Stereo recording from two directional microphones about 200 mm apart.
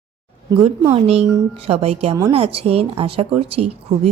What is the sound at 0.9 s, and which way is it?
A woman's voice, 30° right (ahead or behind).